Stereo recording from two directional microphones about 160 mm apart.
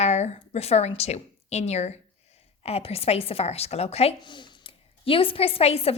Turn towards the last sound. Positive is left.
turn(degrees=40)  # may be behind; listen again after turning